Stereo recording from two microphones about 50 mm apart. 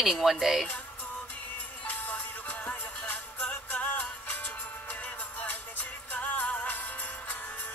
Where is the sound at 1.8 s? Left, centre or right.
Left.